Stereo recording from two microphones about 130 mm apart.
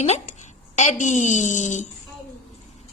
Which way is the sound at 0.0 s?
60° left (ahead or behind).